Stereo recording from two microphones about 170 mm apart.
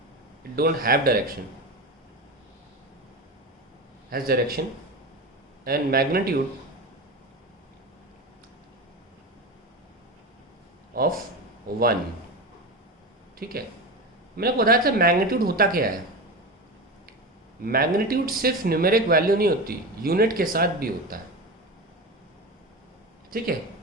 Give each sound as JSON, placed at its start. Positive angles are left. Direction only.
{"t": 0.5, "sound": "speech", "side_deg": -60}
{"t": 4.1, "sound": "speech", "side_deg": -60}
{"t": 5.6, "sound": "speech", "side_deg": -60}
{"t": 10.9, "sound": "a man's voice", "side_deg": -60}
{"t": 13.4, "sound": "speech", "side_deg": -60}
{"t": 17.6, "sound": "speech", "side_deg": -60}